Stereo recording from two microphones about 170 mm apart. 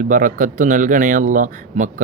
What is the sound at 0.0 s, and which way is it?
Speech, 50° right (ahead or behind).